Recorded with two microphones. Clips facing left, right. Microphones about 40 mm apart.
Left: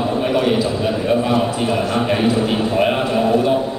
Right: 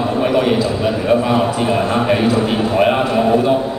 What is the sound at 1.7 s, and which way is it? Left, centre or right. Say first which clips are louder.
Speech: right 3 dB; right.